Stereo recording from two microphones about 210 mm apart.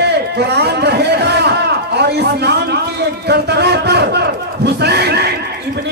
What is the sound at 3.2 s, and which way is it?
Crowd, 50° right (ahead or behind).